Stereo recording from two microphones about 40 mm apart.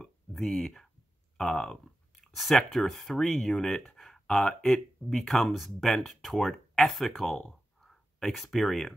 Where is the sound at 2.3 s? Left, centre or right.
Centre.